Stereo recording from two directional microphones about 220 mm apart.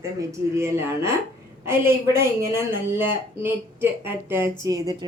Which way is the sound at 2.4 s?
10° right (ahead or behind).